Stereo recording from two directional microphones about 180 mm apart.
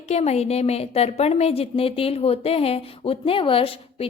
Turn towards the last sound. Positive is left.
turn(degrees=30)  # may be behind; listen again after turning